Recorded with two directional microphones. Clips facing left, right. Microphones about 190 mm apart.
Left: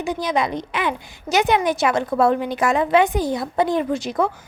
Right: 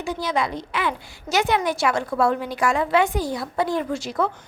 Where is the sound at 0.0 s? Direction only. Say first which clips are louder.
Left 3 dB; 20° left (ahead or behind).